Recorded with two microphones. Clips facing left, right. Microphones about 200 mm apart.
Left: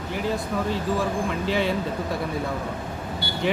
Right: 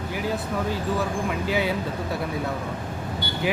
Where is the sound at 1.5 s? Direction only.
5° right (ahead or behind).